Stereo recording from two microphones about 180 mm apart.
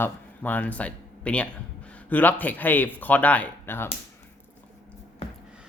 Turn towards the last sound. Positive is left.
turn(degrees=10)  # may be behind; listen again after turning